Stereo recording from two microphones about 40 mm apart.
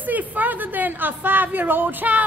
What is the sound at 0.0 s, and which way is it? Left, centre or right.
A woman's voice, right.